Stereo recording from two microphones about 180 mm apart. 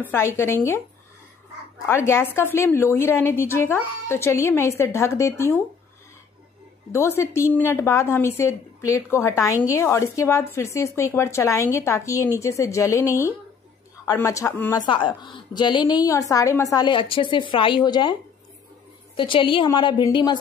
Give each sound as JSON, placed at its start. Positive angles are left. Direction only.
{"t": 0.0, "sound": "a woman's voice", "side_deg": 15}
{"t": 2.0, "sound": "a woman's voice", "side_deg": 15}
{"t": 6.9, "sound": "a woman's voice", "side_deg": 15}
{"t": 14.8, "sound": "a woman's voice", "side_deg": 25}
{"t": 19.1, "sound": "a woman's voice", "side_deg": 25}